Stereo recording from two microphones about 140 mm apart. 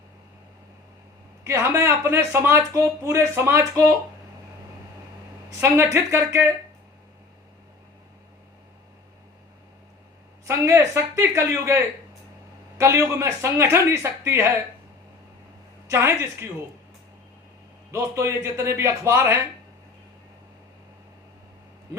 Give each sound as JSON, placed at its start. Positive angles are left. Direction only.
{"t": 1.5, "sound": "speech", "side_deg": -20}
{"t": 5.5, "sound": "a woman's voice", "side_deg": -20}
{"t": 10.4, "sound": "speech", "side_deg": -20}
{"t": 15.9, "sound": "speech", "side_deg": -20}
{"t": 17.9, "sound": "speech", "side_deg": -20}